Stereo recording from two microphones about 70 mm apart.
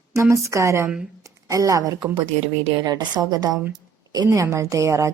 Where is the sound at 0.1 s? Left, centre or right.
Right.